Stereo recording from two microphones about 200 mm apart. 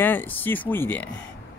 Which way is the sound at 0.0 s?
10° left (ahead or behind).